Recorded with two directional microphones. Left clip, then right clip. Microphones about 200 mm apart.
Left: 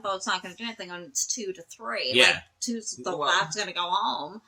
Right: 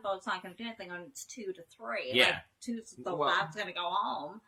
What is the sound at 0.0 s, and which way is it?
A woman's voice, 10° left (ahead or behind).